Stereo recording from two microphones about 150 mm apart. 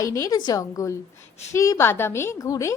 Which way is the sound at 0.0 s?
20° left (ahead or behind).